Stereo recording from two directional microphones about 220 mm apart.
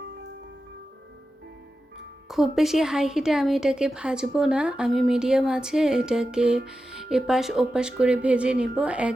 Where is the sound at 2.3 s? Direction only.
Centre (ahead or behind).